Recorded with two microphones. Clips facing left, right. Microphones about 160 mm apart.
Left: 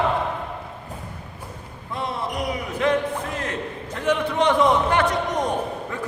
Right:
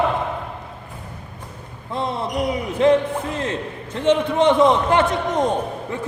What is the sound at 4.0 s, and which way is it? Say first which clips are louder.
Speech: right 4 dB; 25° right (ahead or behind).